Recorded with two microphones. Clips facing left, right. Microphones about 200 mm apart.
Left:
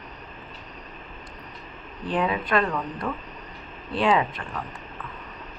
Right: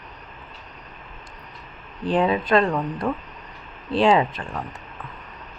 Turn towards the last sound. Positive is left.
turn(degrees=-25)  # may be behind; listen again after turning